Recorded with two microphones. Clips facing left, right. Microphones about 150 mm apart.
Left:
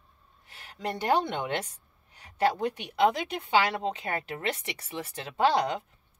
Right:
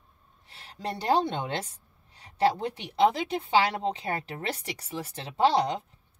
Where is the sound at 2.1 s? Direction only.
30° right (ahead or behind).